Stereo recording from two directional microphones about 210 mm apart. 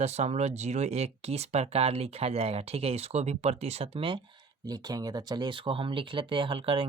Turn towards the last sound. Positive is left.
turn(degrees=-25)  # may be behind; listen again after turning